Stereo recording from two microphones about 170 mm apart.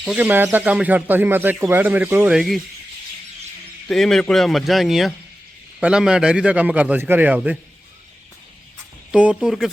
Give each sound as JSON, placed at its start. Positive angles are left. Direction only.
{"t": 0.0, "sound": "speech", "side_deg": -5}
{"t": 3.8, "sound": "speech", "side_deg": 0}
{"t": 9.1, "sound": "speech", "side_deg": -5}